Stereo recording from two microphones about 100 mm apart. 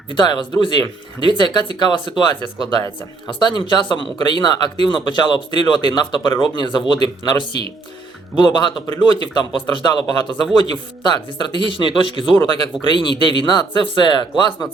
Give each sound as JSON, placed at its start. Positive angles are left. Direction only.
{"t": 0.1, "sound": "a man's voice", "side_deg": 50}